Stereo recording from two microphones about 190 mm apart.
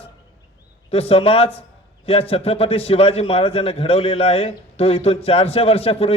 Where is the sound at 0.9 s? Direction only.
30° left (ahead or behind).